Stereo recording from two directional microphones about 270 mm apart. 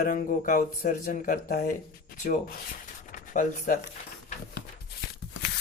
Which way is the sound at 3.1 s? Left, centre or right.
Left.